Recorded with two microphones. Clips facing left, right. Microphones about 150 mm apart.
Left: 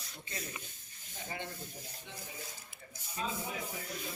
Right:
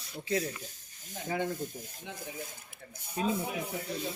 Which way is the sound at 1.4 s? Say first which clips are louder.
Right 10 dB; 45° right (ahead or behind).